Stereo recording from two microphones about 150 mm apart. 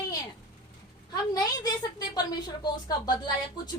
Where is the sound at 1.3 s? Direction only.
25° left (ahead or behind).